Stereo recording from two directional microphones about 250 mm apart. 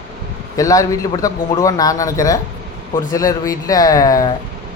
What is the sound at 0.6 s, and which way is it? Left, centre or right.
Speech, centre.